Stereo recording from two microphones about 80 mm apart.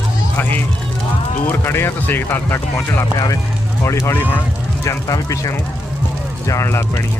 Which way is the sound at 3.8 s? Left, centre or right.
Left.